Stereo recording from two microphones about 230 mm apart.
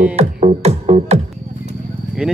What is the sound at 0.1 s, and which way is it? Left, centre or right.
Music, right.